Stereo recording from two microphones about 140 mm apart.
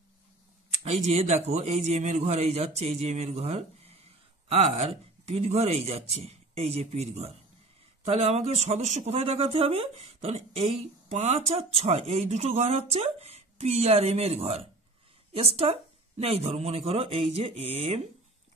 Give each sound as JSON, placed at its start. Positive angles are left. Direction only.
{"t": 0.8, "sound": "speech", "side_deg": -50}